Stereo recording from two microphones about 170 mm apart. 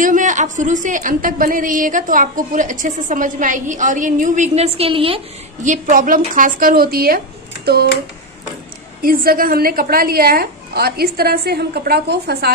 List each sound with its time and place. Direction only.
0.0 s a woman's voice: 50° right (ahead or behind); by 5.2 s 35° right (ahead or behind)
5.6 s a woman's voice: 50° right (ahead or behind); by 7.9 s 70° right (ahead or behind)
9.0 s a woman's voice: 60° right (ahead or behind)